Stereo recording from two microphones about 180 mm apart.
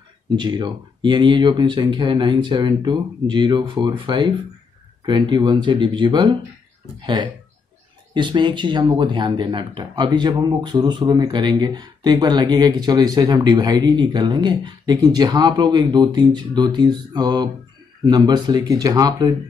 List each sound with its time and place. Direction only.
0.4 s speech: 25° right (ahead or behind)